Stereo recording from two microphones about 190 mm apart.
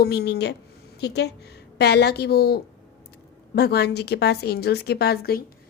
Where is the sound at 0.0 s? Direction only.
60° left (ahead or behind).